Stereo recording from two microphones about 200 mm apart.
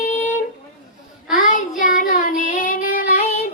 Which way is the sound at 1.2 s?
40° left (ahead or behind).